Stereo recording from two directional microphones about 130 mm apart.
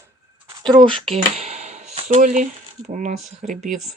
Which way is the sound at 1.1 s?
60° right (ahead or behind).